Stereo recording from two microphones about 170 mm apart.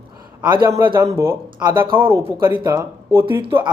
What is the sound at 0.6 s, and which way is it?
A man's voice, 20° right (ahead or behind).